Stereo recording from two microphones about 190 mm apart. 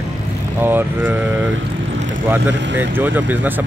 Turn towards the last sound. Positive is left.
turn(degrees=-10)  # may be behind; listen again after turning